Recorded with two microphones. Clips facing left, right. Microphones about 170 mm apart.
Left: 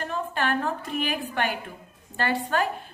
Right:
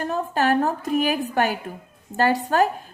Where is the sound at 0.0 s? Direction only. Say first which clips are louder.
Right 6 dB; 40° right (ahead or behind).